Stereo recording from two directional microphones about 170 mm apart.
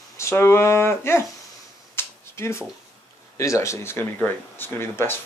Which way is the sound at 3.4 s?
15° left (ahead or behind).